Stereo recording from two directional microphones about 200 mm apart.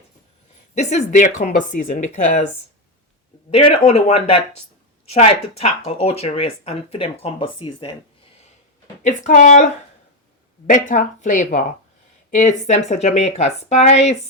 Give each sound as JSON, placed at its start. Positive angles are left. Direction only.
{"t": 0.8, "sound": "speech", "side_deg": 35}
{"t": 3.5, "sound": "speech", "side_deg": 30}
{"t": 9.0, "sound": "speech", "side_deg": 40}